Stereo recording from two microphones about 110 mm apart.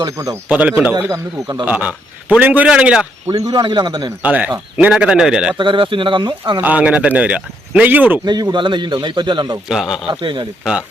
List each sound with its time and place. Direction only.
0.4 s speech: 15° right (ahead or behind)
1.0 s speech: 25° right (ahead or behind)
1.6 s speech: 15° right (ahead or behind)
3.2 s speech: 30° right (ahead or behind)
3.6 s a man's voice: 45° right (ahead or behind)
4.2 s speech: 15° right (ahead or behind)
5.5 s a man's voice: 50° right (ahead or behind)
6.6 s speech: 15° right (ahead or behind)
8.2 s a man's voice: 35° right (ahead or behind)
9.6 s speech: 5° right (ahead or behind)
10.1 s a man's voice: 45° right (ahead or behind)
10.6 s speech: 5° right (ahead or behind)